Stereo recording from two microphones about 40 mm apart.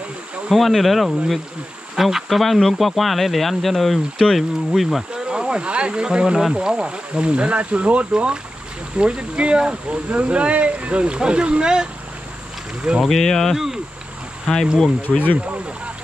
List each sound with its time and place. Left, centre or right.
0.5 s speech: centre
5.1 s speech: centre
10.0 s speech: right
13.0 s speech: centre
15.1 s speech: centre